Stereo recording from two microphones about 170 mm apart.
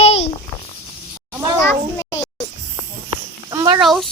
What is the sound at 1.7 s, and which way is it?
Speech, 20° left (ahead or behind).